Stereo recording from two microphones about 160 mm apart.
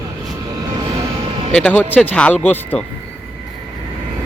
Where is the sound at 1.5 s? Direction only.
10° left (ahead or behind).